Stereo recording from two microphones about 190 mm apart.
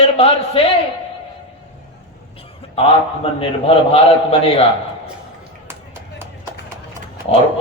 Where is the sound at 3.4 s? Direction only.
30° left (ahead or behind).